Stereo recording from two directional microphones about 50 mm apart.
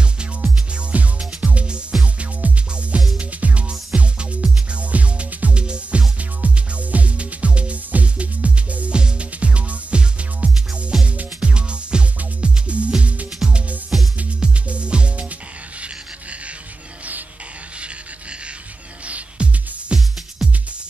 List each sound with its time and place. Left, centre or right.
0.9 s music: right
19.0 s music: right
20.4 s music: centre